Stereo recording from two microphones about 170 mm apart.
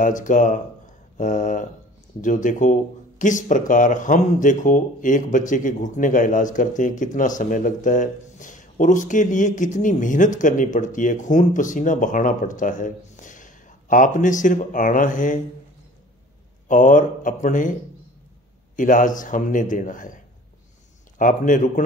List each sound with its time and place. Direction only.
0.0 s speech: 50° left (ahead or behind)
16.6 s speech: 50° left (ahead or behind)
18.8 s speech: 50° left (ahead or behind)
21.2 s speech: 50° left (ahead or behind)